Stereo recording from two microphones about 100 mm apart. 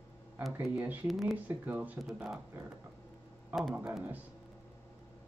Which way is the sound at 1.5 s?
15° right (ahead or behind).